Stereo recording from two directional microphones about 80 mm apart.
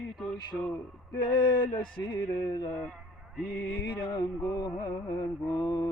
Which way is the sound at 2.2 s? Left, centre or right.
Left.